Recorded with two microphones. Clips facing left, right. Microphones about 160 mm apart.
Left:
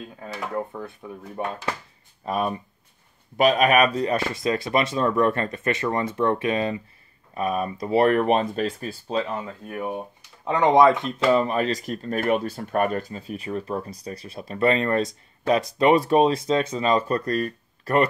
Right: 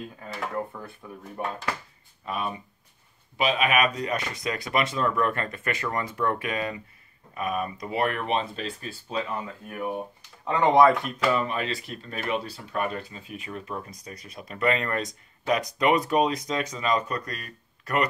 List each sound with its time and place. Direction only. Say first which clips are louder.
0.6 s speech: left 3 dB; 15° left (ahead or behind)
2.2 s speech: left 6 dB; 40° left (ahead or behind)
9.7 s speech: left 1 dB; 15° left (ahead or behind); by 18.0 s 35° left (ahead or behind)